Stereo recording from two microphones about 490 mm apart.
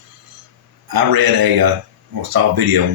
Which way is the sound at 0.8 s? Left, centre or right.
Right.